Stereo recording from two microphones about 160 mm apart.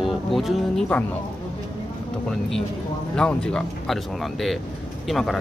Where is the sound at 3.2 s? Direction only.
5° left (ahead or behind).